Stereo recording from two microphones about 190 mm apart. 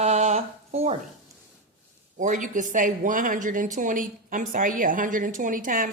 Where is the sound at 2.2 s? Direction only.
40° right (ahead or behind).